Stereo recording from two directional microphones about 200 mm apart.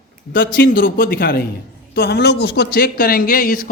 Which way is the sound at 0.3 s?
45° left (ahead or behind).